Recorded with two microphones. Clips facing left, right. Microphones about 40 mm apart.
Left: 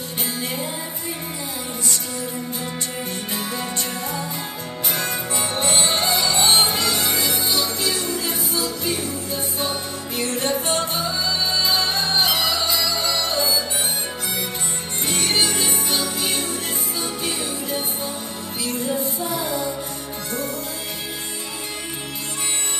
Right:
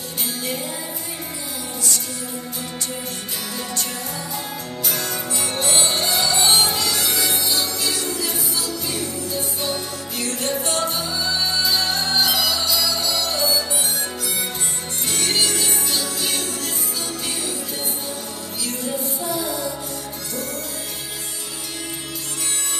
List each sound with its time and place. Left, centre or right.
4.8 s music: left
15.0 s music: left
19.2 s music: left